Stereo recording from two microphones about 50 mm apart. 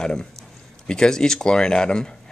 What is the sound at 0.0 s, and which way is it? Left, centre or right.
Speech, centre.